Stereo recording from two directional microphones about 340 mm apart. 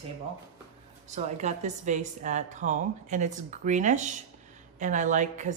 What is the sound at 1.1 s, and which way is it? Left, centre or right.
A woman's voice, centre.